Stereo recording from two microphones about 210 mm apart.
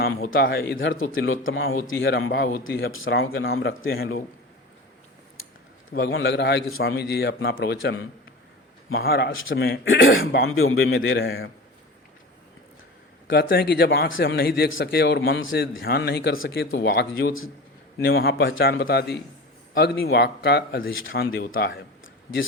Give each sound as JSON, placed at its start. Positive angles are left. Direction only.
{"t": 0.0, "sound": "a man's voice", "side_deg": 45}
{"t": 2.0, "sound": "a man's voice", "side_deg": 50}
{"t": 3.2, "sound": "speech", "side_deg": 75}
{"t": 3.8, "sound": "a man's voice", "side_deg": 45}
{"t": 5.9, "sound": "a man's voice", "side_deg": 55}
{"t": 9.3, "sound": "a man's voice", "side_deg": 65}
{"t": 10.9, "sound": "speech", "side_deg": 65}
{"t": 13.2, "sound": "a man's voice", "side_deg": 50}
{"t": 16.3, "sound": "speech", "side_deg": 70}
{"t": 16.7, "sound": "a man's voice", "side_deg": 50}